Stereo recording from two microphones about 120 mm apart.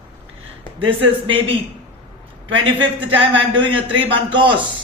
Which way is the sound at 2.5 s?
45° right (ahead or behind).